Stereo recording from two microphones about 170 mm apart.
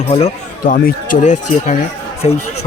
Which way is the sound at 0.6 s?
55° left (ahead or behind).